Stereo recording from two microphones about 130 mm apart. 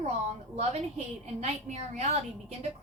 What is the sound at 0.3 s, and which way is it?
A woman's voice, 55° right (ahead or behind).